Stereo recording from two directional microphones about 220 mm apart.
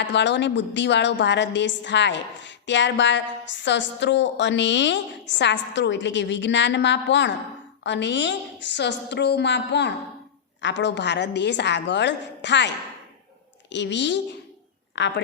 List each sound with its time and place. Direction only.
0.0 s a woman's voice: 55° left (ahead or behind)